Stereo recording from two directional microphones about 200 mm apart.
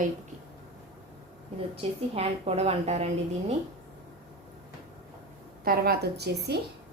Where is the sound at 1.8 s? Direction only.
30° right (ahead or behind).